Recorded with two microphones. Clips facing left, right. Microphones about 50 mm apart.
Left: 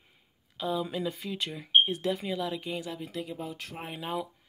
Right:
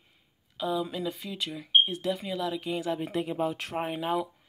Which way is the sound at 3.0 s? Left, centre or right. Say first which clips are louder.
Right 7 dB; right.